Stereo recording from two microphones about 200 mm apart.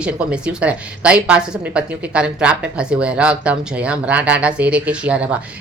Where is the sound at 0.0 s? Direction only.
5° right (ahead or behind).